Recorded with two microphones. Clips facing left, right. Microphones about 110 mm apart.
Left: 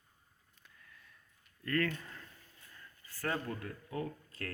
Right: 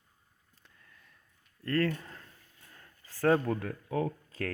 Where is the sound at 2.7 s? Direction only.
85° right.